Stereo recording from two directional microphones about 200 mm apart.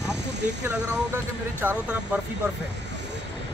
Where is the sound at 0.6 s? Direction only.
10° right (ahead or behind).